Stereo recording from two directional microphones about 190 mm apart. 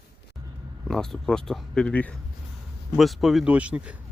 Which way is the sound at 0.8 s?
Centre (ahead or behind).